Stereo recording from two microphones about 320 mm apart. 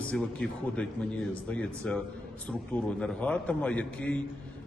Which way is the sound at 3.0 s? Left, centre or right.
Centre.